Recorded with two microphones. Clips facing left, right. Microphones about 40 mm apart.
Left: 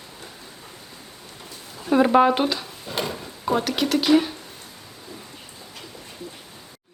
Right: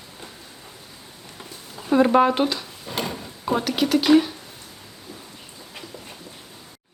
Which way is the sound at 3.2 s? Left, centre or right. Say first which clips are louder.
Left 2 dB; centre.